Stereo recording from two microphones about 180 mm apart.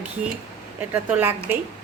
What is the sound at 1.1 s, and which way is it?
Speech, 10° right (ahead or behind).